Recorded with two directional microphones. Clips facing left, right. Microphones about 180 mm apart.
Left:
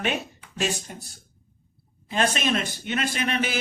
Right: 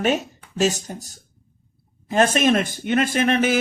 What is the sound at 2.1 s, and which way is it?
Speech, 45° right (ahead or behind).